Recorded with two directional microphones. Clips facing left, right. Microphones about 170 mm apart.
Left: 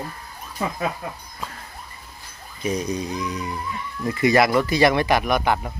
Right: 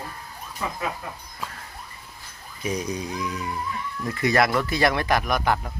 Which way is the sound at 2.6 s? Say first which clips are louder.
Left 3 dB; 10° right (ahead or behind).